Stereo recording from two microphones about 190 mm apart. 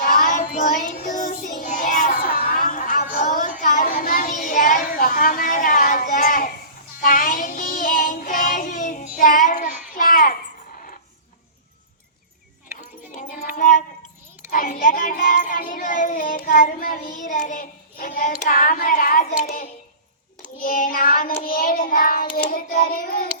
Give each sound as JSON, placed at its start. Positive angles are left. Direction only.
{"t": 0.0, "sound": "child singing", "side_deg": 50}
{"t": 3.4, "sound": "a sound", "side_deg": 45}
{"t": 7.0, "sound": "child singing", "side_deg": 45}
{"t": 12.7, "sound": "clip-clop", "side_deg": 45}
{"t": 13.6, "sound": "child singing", "side_deg": 45}
{"t": 22.4, "sound": "hands", "side_deg": 50}